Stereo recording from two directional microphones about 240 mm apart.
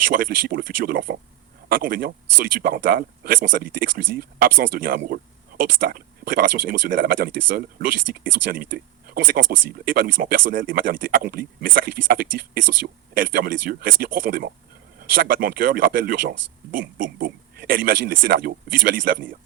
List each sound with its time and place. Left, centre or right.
0.1 s speech: right